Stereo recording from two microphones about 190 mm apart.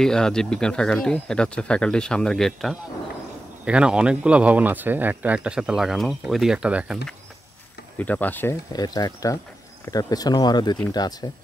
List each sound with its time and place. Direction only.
0.0 s speech: 5° left (ahead or behind)
8.0 s speech: 10° left (ahead or behind)
8.7 s speech: 20° left (ahead or behind)